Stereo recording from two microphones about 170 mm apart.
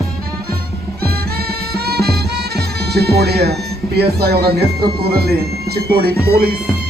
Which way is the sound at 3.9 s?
70° right (ahead or behind).